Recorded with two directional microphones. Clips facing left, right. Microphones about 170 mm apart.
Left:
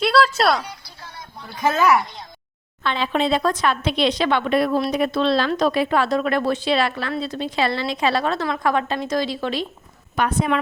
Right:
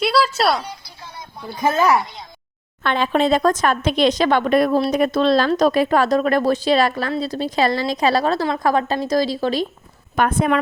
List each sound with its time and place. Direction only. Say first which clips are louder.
0.0 s a sound: even; 5° right (ahead or behind)
1.6 s speech: right 1 dB; 30° right (ahead or behind)
2.8 s a woman's voice: right 3 dB; 50° right (ahead or behind)
10.2 s speech: right 3 dB; 50° right (ahead or behind)